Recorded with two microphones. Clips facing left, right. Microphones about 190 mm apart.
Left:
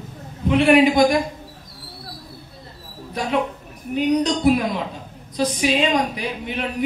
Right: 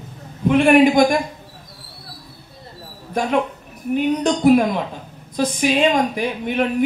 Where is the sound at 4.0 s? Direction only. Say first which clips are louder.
Even; 50° right (ahead or behind).